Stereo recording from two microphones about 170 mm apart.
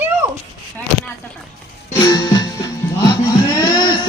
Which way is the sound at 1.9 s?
25° left (ahead or behind).